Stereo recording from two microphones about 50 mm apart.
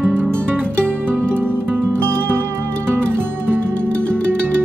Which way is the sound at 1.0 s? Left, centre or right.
Right.